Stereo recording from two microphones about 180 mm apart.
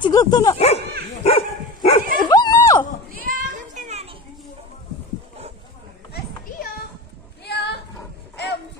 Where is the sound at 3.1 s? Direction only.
50° right (ahead or behind).